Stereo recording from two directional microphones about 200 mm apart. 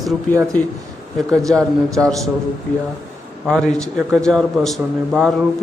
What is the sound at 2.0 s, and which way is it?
Speech, centre (ahead or behind).